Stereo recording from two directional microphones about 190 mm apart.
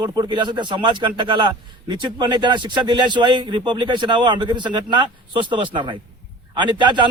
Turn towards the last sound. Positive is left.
turn(degrees=-25)  # may be behind; listen again after turning